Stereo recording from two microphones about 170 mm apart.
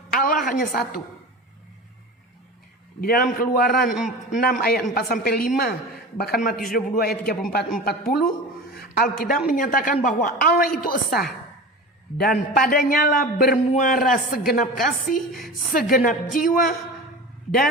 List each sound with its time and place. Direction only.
0.1 s a sound: 55° left (ahead or behind)
0.4 s speech: 55° left (ahead or behind)
3.0 s a woman's voice: 60° left (ahead or behind)